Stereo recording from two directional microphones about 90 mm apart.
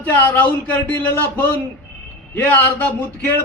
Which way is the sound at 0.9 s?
20° left (ahead or behind).